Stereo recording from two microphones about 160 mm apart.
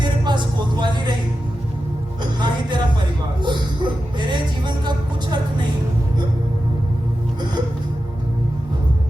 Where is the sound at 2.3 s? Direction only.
30° right (ahead or behind).